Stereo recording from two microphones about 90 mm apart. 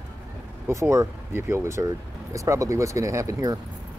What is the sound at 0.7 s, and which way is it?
Speech, 35° right (ahead or behind).